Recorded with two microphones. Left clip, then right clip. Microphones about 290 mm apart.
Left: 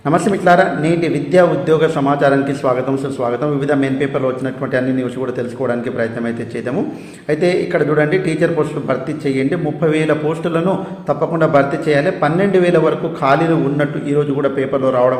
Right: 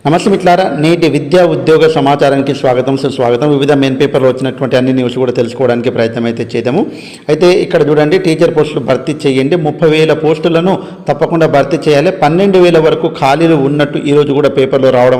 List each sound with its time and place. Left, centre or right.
0.0 s a man's voice: right
5.2 s a man's voice: right